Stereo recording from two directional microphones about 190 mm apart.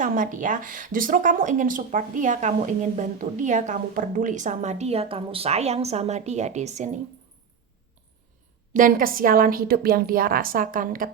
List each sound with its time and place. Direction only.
0.0 s speech: 45° right (ahead or behind)
8.7 s a woman's voice: 45° right (ahead or behind)